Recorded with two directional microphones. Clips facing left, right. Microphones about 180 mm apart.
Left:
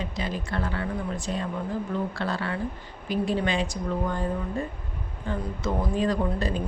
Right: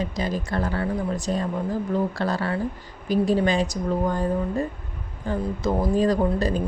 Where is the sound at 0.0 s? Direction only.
40° right (ahead or behind).